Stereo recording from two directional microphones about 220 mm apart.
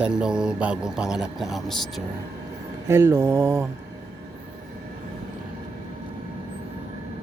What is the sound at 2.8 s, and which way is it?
Speech, 10° right (ahead or behind).